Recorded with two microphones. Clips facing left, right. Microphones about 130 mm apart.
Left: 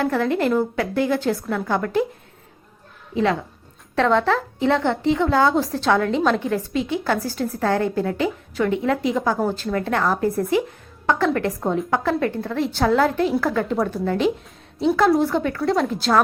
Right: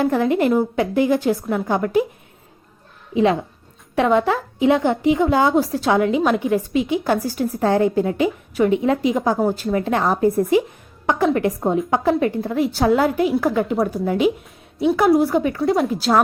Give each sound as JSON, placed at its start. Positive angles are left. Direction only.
{"t": 0.0, "sound": "a woman's voice", "side_deg": -15}
{"t": 3.9, "sound": "a woman's voice", "side_deg": -15}